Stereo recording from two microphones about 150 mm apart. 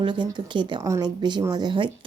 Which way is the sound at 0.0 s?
30° right (ahead or behind).